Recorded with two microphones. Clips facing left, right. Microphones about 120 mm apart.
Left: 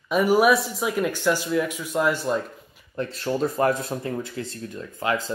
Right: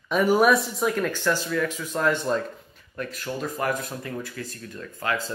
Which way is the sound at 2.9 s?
30° left (ahead or behind).